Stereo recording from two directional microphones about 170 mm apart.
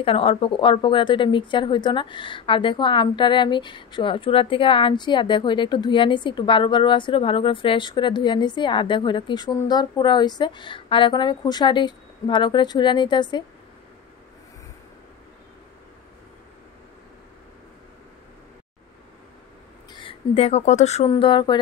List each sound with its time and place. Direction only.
0.0 s speech: 35° left (ahead or behind)
19.9 s speech: 30° left (ahead or behind)
21.1 s speech: 25° left (ahead or behind)